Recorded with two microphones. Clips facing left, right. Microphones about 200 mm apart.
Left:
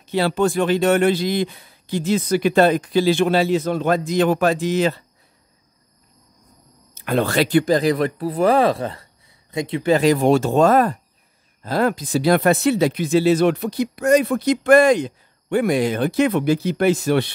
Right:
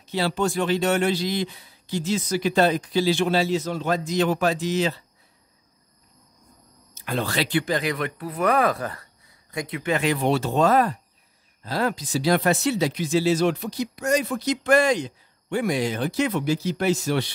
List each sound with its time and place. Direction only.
0.0 s speech: 55° left (ahead or behind)
6.9 s speech: 60° left (ahead or behind)